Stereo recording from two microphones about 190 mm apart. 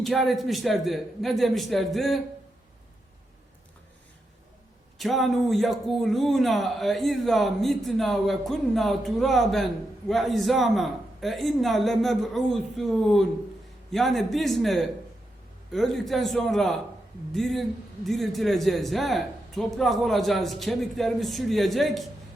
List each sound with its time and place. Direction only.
0.0 s a man's voice: centre (ahead or behind)
4.9 s a man's voice: centre (ahead or behind)